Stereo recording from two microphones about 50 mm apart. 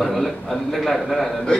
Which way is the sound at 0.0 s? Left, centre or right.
Centre.